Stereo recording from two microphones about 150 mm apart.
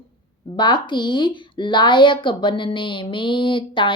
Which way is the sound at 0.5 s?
30° left (ahead or behind).